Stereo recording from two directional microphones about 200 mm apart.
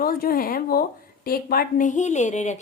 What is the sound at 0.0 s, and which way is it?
A woman's voice, 45° left (ahead or behind).